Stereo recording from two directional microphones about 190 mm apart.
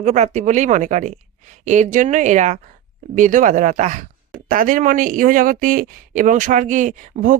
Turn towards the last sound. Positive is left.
turn(degrees=-45)  # may be behind; listen again after turning